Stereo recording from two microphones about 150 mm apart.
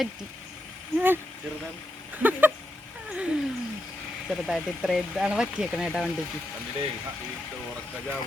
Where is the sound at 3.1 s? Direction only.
10° right (ahead or behind).